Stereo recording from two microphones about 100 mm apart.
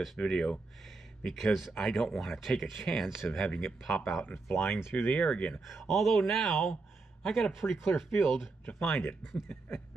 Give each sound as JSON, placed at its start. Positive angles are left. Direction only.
{"t": 0.0, "sound": "speech", "side_deg": 0}
{"t": 4.2, "sound": "speech", "side_deg": 20}
{"t": 5.7, "sound": "speech", "side_deg": 0}